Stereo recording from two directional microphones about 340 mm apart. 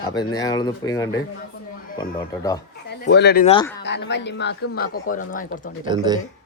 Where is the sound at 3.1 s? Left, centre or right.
Left.